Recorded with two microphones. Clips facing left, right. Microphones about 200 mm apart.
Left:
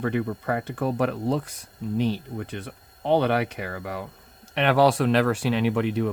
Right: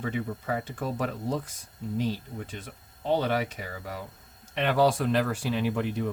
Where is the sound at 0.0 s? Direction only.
65° left (ahead or behind).